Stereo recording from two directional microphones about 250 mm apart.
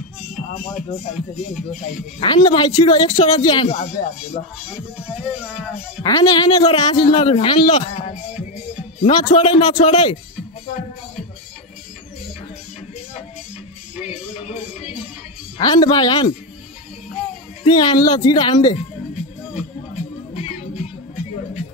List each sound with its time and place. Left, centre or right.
0.5 s speech: left
1.1 s speech: centre
2.1 s speech: centre
4.6 s speech: centre
6.0 s speech: centre
14.5 s music: centre
15.5 s speech: centre
17.6 s speech: centre
20.3 s music: left